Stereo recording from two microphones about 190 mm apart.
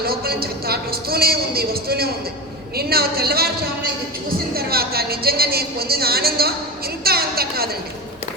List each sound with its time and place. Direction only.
0.0 s speech: 55° right (ahead or behind)
4.5 s a woman's voice: 55° right (ahead or behind)